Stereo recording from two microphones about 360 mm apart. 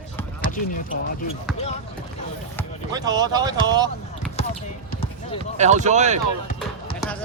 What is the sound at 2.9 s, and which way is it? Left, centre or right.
Speech, centre.